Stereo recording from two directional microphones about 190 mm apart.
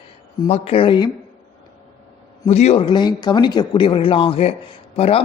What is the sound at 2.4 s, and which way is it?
A man's voice, 35° left (ahead or behind).